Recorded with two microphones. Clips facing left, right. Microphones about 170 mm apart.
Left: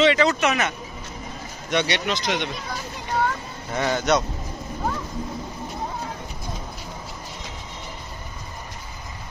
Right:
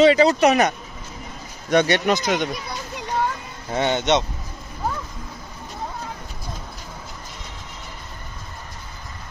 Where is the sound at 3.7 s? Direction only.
25° right (ahead or behind).